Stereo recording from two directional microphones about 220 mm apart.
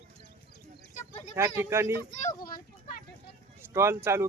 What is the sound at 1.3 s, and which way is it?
Speech, 10° right (ahead or behind).